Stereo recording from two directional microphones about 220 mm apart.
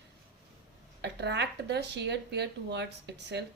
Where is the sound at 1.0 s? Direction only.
50° right (ahead or behind).